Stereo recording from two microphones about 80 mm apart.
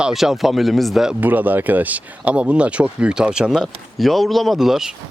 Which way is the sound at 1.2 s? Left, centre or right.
Right.